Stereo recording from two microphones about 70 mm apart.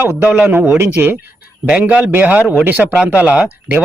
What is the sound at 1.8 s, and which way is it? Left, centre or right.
Speech, centre.